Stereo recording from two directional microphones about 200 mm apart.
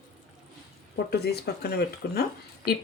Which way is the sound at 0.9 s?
55° left (ahead or behind).